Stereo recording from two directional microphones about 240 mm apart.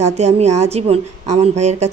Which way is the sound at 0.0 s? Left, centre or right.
Right.